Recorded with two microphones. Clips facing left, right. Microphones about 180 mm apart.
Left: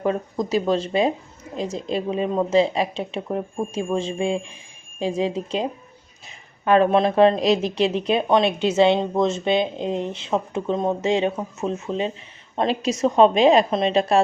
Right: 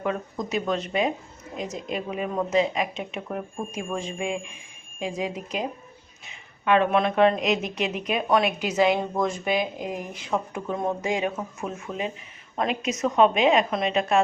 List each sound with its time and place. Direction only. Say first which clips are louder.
0.0 s a woman's voice: left 5 dB; 35° left (ahead or behind)